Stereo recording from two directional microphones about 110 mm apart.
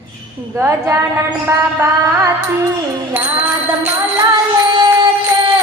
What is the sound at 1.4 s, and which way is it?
Mantra, 25° right (ahead or behind).